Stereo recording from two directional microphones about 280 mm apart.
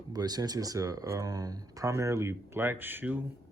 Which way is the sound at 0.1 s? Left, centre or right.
Centre.